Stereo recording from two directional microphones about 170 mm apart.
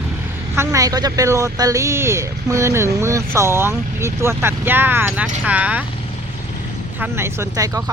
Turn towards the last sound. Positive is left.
turn(degrees=-20)  # may be behind; listen again after turning